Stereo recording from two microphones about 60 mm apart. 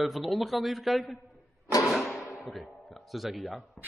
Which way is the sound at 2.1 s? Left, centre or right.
Centre.